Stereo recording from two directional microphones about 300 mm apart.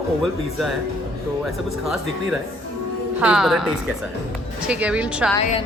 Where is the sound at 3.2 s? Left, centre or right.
Centre.